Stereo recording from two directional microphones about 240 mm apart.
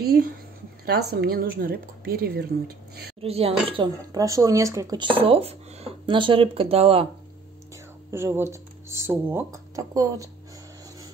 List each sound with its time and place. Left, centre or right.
0.0 s a woman's voice: right
3.2 s speech: right
7.7 s speech: centre